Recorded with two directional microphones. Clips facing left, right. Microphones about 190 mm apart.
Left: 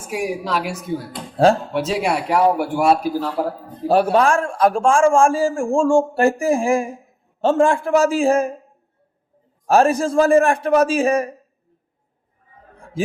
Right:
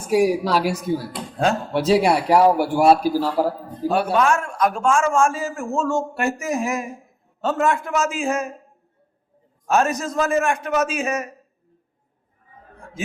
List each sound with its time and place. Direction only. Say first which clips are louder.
0.1 s speech: right 5 dB; 35° right (ahead or behind)
1.7 s speech: right 3 dB; 35° right (ahead or behind)
3.8 s a man's voice: left 3 dB; 35° left (ahead or behind)
9.6 s a man's voice: left 5 dB; 30° left (ahead or behind)